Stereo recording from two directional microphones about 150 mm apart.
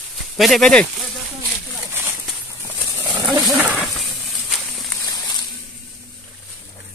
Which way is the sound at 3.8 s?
Centre (ahead or behind).